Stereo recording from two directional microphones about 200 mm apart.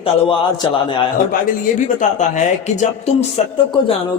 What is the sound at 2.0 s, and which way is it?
A man's voice, 35° left (ahead or behind).